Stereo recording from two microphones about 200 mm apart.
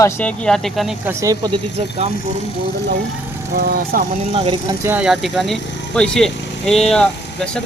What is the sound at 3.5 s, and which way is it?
Speech, 45° right (ahead or behind).